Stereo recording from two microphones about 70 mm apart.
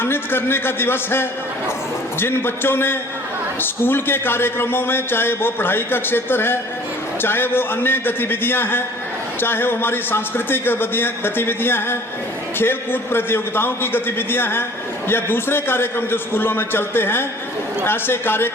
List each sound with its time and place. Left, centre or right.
0.0 s a man's voice: left